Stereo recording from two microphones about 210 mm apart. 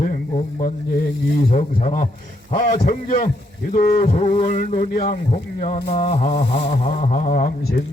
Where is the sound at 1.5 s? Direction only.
30° left (ahead or behind).